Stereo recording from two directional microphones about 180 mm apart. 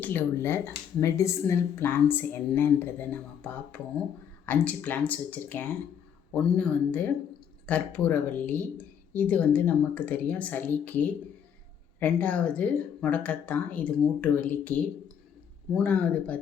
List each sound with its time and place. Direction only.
0.0 s speech: 10° left (ahead or behind)